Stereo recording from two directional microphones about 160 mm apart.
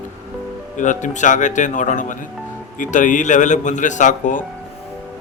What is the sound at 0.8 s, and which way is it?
Speech, 50° left (ahead or behind).